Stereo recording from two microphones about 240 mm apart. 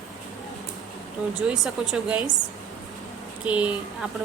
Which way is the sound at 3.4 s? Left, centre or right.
Centre.